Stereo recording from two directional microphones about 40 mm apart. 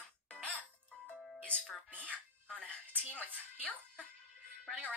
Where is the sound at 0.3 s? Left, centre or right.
Left.